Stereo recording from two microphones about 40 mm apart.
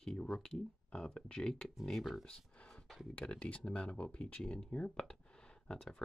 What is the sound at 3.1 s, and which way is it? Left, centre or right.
Speech, left.